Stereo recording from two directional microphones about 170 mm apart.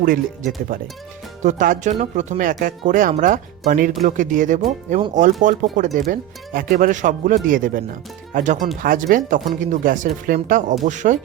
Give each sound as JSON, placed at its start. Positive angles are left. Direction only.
{"t": 0.0, "sound": "speech", "side_deg": -55}